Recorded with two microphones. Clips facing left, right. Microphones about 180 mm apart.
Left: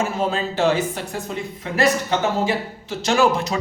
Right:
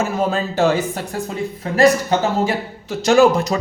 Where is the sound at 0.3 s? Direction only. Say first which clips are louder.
Right 2 dB; 45° right (ahead or behind).